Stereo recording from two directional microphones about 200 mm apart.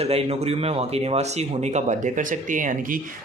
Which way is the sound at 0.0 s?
30° right (ahead or behind).